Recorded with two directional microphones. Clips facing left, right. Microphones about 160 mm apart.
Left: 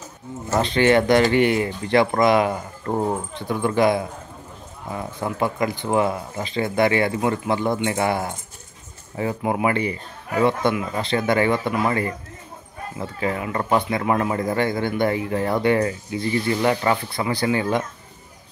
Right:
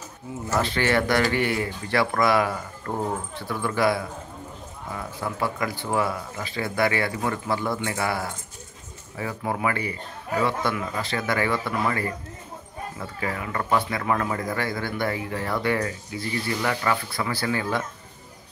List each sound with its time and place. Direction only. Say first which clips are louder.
0.5 s speech: left 6 dB; 20° left (ahead or behind)